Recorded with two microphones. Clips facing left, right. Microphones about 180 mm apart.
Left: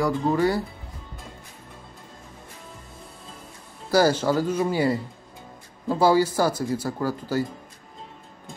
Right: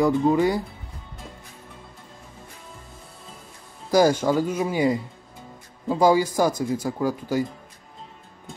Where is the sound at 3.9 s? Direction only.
15° right (ahead or behind).